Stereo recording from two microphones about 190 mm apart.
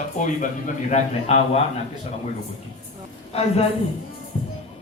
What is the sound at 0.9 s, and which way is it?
Speech, 40° left (ahead or behind).